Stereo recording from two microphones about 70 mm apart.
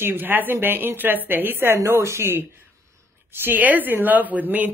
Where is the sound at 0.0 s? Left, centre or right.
Right.